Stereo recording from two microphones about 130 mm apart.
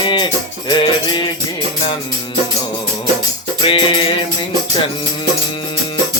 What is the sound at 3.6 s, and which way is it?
Music, 45° left (ahead or behind).